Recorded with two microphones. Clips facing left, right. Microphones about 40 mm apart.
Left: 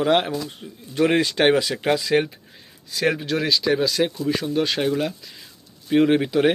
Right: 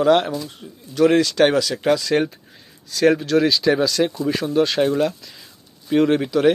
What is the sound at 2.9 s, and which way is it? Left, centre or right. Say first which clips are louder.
Speech: right 6 dB; centre.